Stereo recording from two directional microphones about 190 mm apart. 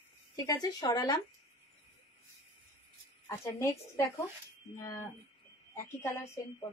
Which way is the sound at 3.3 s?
15° left (ahead or behind).